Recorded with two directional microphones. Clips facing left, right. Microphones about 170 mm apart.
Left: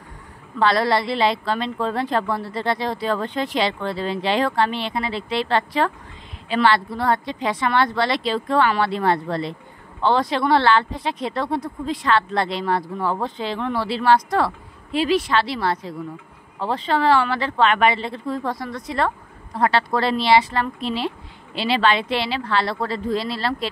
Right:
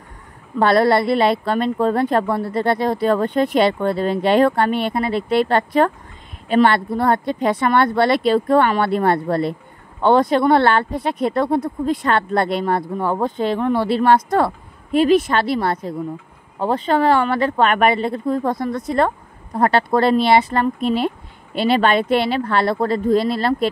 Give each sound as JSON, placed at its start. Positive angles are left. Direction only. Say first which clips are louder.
{"t": 0.6, "sound": "a woman's voice", "louder": "right 5 dB", "side_deg": -55}